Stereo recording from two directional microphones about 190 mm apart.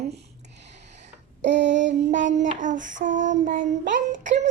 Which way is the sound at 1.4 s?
70° right (ahead or behind).